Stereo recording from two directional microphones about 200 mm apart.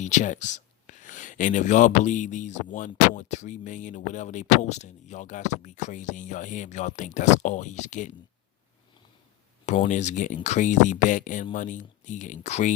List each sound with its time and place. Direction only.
0.0 s speech: 35° left (ahead or behind)
9.6 s speech: 35° left (ahead or behind)